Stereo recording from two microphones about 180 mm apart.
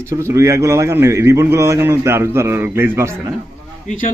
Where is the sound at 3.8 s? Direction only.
45° left (ahead or behind).